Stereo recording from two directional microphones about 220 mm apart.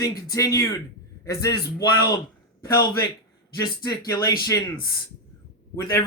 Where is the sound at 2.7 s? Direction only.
20° left (ahead or behind).